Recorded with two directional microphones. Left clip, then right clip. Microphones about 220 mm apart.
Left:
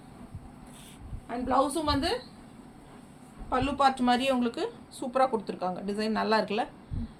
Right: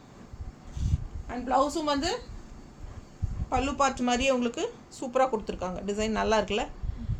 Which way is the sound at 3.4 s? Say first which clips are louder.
Left 1 dB; 15° right (ahead or behind).